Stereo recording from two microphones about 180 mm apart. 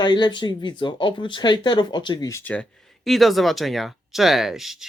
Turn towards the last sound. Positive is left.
turn(degrees=0)  # may be behind; listen again after turning